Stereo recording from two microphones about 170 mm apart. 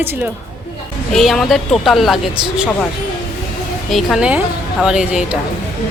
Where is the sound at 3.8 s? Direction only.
Centre (ahead or behind).